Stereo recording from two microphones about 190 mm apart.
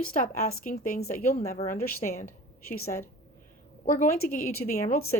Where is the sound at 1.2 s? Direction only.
40° left (ahead or behind).